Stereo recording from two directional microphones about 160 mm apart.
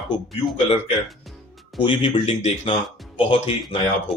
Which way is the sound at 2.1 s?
45° left (ahead or behind).